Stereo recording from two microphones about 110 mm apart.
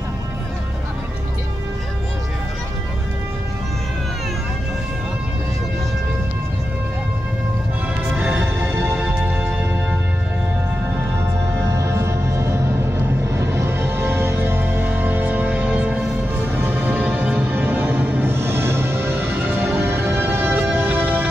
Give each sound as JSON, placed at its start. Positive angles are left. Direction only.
{"t": 8.2, "sound": "music", "side_deg": -10}
{"t": 11.6, "sound": "music", "side_deg": -25}